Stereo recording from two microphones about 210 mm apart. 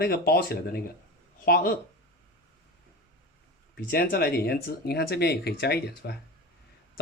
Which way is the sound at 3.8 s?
45° left (ahead or behind).